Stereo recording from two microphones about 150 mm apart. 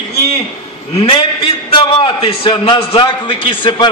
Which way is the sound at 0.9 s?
35° left (ahead or behind).